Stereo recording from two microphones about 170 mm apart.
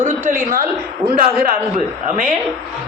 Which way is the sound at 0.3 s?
55° right (ahead or behind).